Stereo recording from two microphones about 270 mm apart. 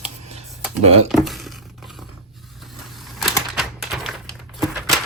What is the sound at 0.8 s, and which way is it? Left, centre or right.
Speech, right.